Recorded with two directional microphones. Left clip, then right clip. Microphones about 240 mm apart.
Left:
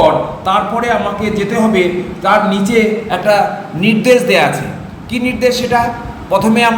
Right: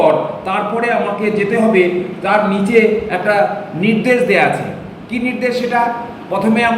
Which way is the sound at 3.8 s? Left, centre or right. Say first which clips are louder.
Left 4 dB; centre.